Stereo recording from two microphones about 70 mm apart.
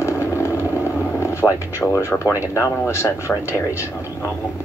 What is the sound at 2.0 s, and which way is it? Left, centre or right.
Speech, left.